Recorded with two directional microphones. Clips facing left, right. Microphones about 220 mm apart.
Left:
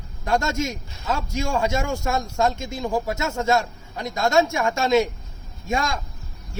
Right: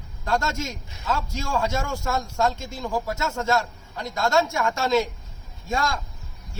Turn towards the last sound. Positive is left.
turn(degrees=20)  # may be behind; listen again after turning